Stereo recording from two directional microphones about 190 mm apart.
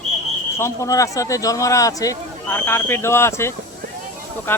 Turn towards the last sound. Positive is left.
turn(degrees=10)  # may be behind; listen again after turning